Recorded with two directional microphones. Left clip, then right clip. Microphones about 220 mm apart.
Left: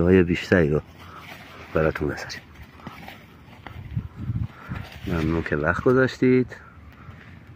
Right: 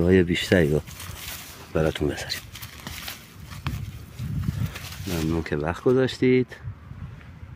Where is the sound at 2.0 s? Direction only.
40° right (ahead or behind).